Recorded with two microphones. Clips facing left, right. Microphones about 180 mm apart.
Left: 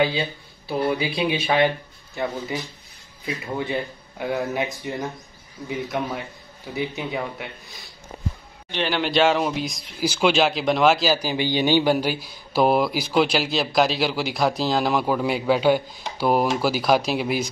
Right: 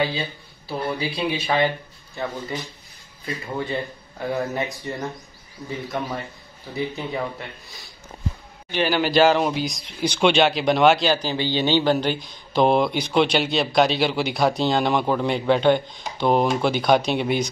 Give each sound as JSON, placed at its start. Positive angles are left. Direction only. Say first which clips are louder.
{"t": 0.8, "sound": "speech", "louder": "left 2 dB", "side_deg": 15}
{"t": 2.1, "sound": "speech", "louder": "left 2 dB", "side_deg": 10}
{"t": 6.7, "sound": "speech", "louder": "even", "side_deg": 5}
{"t": 8.7, "sound": "speech", "louder": "right 3 dB", "side_deg": -5}